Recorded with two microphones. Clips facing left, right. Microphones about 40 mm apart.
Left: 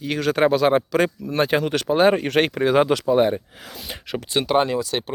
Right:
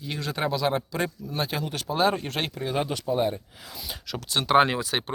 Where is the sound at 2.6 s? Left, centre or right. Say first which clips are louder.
Left 8 dB; left.